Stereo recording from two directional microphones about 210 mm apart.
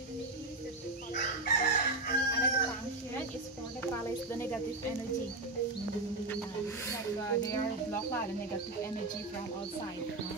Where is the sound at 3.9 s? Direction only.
10° left (ahead or behind).